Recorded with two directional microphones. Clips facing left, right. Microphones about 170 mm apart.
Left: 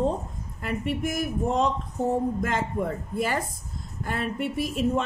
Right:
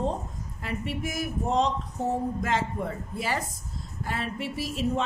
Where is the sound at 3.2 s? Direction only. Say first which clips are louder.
Left 4 dB; 50° left (ahead or behind).